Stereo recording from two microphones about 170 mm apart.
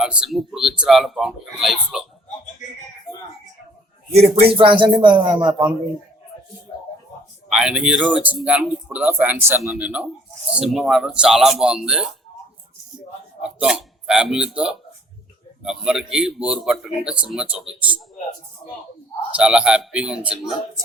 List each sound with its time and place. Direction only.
0.0 s a man's voice: 5° right (ahead or behind)
4.1 s speech: 35° right (ahead or behind)
7.5 s a man's voice: 5° right (ahead or behind)
13.4 s a man's voice: 5° right (ahead or behind)
19.4 s a man's voice: 5° right (ahead or behind)